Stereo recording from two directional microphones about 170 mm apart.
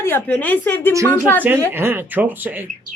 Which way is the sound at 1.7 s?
15° right (ahead or behind).